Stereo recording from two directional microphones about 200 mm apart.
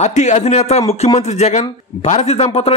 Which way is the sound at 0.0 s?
35° left (ahead or behind).